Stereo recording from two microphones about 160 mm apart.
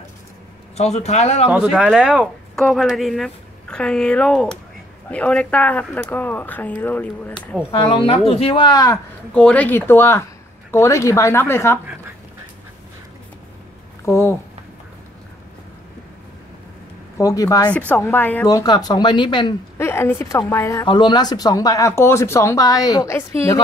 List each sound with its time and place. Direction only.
0.7 s speech: 45° left (ahead or behind)
1.5 s a woman's voice: 5° right (ahead or behind); by 7.3 s 10° left (ahead or behind)
7.7 s speech: 35° left (ahead or behind)
9.3 s speech: 5° left (ahead or behind)
14.0 s speech: 15° left (ahead or behind)
17.2 s speech: 20° left (ahead or behind)
17.7 s speech: 10° left (ahead or behind)
18.5 s speech: 25° left (ahead or behind)
19.8 s speech: 15° left (ahead or behind)
20.8 s speech: 30° left (ahead or behind)